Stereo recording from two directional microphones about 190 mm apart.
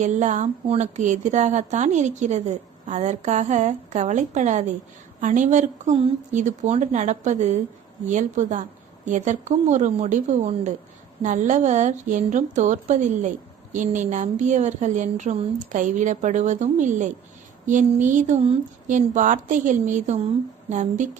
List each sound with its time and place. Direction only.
0.0 s a woman's voice: 40° right (ahead or behind)